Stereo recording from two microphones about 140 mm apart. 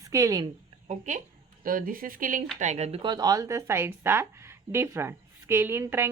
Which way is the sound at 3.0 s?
30° right (ahead or behind).